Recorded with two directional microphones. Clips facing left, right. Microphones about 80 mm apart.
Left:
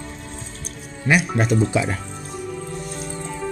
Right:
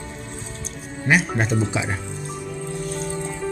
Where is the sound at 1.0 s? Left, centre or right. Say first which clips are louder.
Left 1 dB; right.